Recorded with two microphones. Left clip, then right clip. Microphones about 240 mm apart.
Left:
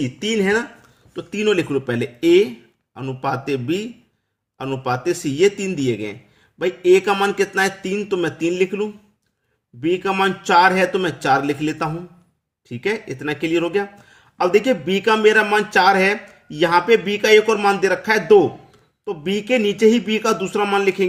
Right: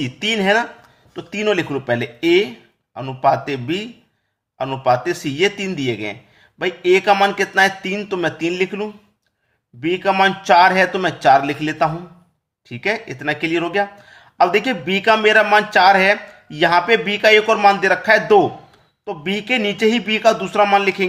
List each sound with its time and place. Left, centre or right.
0.0 s speech: centre